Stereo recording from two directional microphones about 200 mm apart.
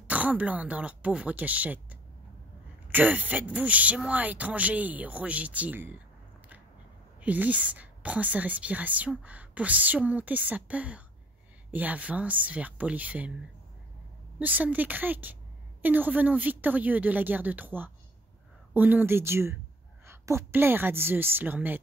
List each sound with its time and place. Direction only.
0.0 s speech: 5° right (ahead or behind)
7.2 s speech: 10° right (ahead or behind)
14.4 s speech: 10° right (ahead or behind)